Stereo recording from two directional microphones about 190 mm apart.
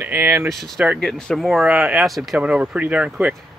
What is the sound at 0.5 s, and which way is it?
Speech, centre (ahead or behind).